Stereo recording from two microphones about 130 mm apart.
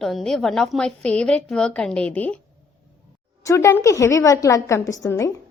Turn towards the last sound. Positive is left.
turn(degrees=25)  # may be behind; listen again after turning